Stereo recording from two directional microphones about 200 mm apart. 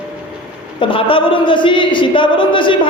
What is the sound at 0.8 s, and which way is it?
Speech, 25° left (ahead or behind).